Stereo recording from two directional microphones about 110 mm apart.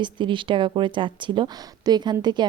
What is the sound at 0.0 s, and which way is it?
A woman's voice, 45° right (ahead or behind).